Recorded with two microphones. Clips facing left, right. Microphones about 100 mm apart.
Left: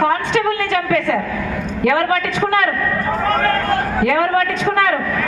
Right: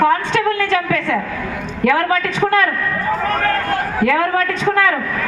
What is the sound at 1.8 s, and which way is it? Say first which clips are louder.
Speech: right 1 dB; 20° left (ahead or behind).